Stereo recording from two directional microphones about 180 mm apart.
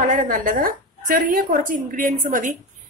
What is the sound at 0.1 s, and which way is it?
Speech, 45° right (ahead or behind).